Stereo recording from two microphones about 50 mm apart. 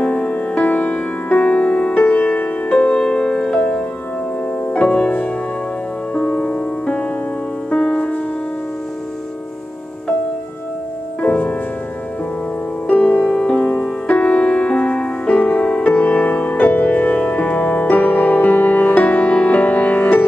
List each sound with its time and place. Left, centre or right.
0.0 s music: left
2.9 s music: centre
4.6 s music: left
11.1 s music: left
12.8 s music: left